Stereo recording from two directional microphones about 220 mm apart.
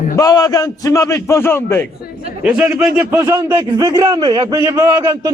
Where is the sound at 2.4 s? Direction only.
5° right (ahead or behind).